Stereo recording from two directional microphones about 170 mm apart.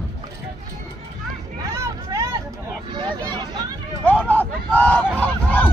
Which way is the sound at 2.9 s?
25° right (ahead or behind).